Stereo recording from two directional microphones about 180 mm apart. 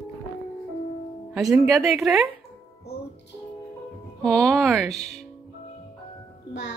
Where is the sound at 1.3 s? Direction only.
Centre (ahead or behind).